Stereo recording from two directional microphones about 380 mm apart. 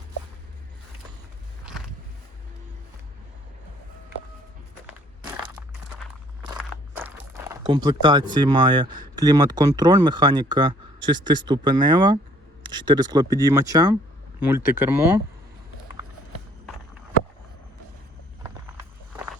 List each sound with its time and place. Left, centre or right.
4.9 s crushing: centre
6.5 s speech: centre